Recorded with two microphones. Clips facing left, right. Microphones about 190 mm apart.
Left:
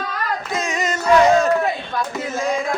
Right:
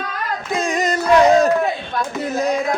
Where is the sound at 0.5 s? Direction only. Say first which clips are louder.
Right 6 dB; 35° right (ahead or behind).